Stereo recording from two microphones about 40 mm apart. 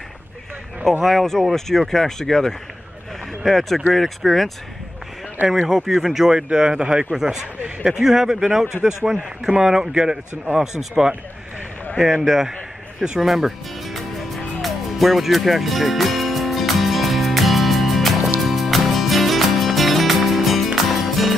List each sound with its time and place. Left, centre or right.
0.8 s speech: centre
5.5 s a man's voice: centre
6.5 s a man's voice: right
13.2 s music: centre